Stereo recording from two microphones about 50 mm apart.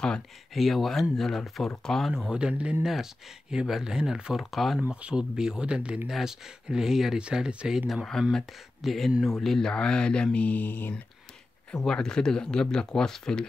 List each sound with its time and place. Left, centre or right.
0.6 s speech: centre
2.3 s speech: right
4.5 s speech: centre
4.8 s speech: right
6.0 s speech: centre
7.2 s speech: centre
8.0 s speech: centre
9.7 s speech: centre; by 11.0 s left
11.8 s speech: centre